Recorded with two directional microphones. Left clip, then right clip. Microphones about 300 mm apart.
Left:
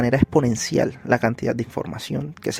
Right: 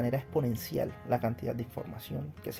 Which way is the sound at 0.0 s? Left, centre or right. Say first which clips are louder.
Left 12 dB; left.